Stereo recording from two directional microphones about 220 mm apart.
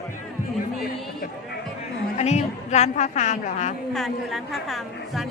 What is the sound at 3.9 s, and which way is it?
A woman's voice, centre (ahead or behind).